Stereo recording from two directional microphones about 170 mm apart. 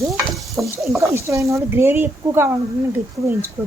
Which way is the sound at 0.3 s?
Centre (ahead or behind).